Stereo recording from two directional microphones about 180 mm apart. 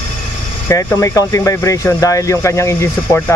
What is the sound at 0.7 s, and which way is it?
Speech, 15° left (ahead or behind).